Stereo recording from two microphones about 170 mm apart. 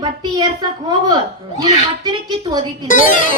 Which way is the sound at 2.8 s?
50° left (ahead or behind).